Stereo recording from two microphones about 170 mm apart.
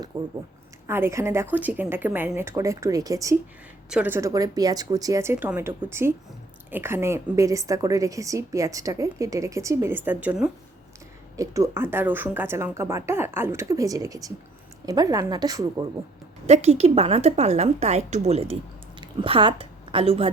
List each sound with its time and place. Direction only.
0.1 s a woman's voice: 25° right (ahead or behind)
0.9 s speech: 15° right (ahead or behind)
3.8 s a woman's voice: 5° right (ahead or behind); by 15.9 s 25° right (ahead or behind)
16.5 s a woman's voice: 40° right (ahead or behind)